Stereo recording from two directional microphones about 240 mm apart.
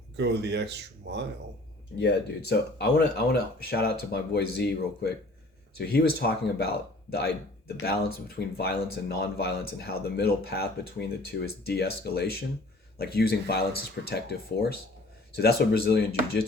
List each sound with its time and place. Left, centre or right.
0.2 s speech: right
2.0 s speech: left
5.7 s speech: left